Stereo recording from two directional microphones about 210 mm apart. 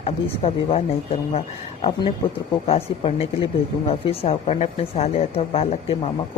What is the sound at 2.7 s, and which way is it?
A woman's voice, 30° left (ahead or behind).